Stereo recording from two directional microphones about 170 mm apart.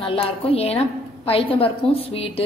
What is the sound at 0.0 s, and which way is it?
A woman's voice, 35° left (ahead or behind).